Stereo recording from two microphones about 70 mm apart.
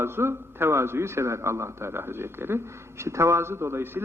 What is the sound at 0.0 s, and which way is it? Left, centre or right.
A man's voice, right.